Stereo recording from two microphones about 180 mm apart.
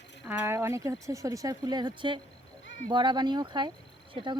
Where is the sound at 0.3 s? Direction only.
15° right (ahead or behind).